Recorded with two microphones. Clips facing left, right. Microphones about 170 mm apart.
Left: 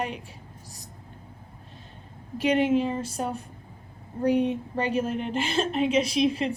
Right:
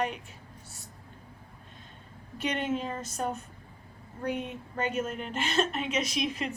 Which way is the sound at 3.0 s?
30° left (ahead or behind).